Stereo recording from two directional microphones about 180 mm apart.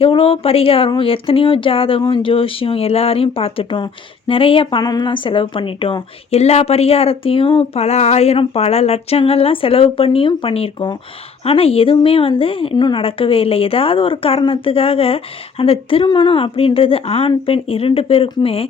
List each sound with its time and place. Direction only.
0.0 s a woman's voice: 30° left (ahead or behind)